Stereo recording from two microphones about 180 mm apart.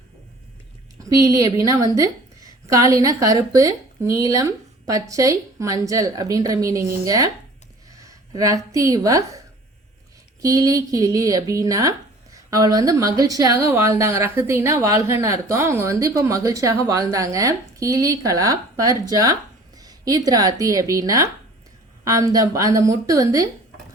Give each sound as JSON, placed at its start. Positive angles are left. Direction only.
{"t": 0.9, "sound": "a woman's voice", "side_deg": -20}
{"t": 10.4, "sound": "speech", "side_deg": -20}